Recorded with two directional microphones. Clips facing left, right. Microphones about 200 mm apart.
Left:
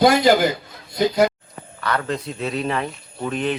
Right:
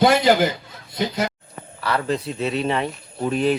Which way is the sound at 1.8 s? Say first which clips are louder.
Right 1 dB; 5° right (ahead or behind).